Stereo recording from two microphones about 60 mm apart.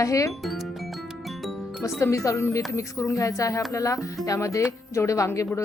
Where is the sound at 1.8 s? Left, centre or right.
Left.